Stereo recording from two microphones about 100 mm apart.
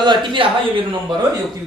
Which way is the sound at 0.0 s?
50° right (ahead or behind).